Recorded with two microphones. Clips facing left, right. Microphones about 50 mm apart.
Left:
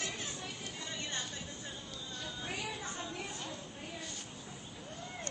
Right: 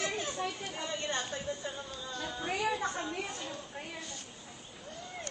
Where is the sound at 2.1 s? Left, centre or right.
Right.